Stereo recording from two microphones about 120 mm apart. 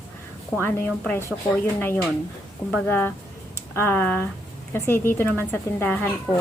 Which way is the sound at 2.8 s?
15° left (ahead or behind).